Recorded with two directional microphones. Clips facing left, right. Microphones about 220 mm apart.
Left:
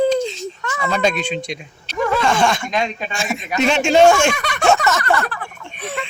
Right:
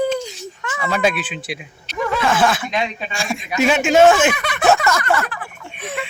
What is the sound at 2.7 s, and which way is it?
Speech, 40° left (ahead or behind).